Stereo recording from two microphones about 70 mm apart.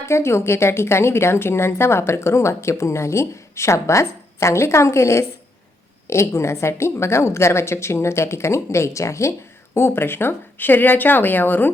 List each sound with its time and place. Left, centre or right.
0.0 s a woman's voice: left